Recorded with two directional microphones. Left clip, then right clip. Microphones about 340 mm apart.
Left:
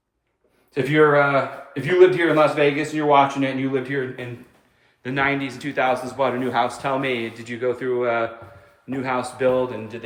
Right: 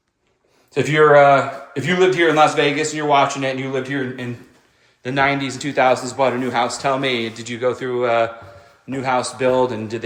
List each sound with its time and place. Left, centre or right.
0.7 s a man's voice: centre
5.0 s a man's voice: centre